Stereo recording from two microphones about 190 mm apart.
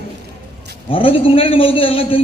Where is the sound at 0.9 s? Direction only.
30° left (ahead or behind).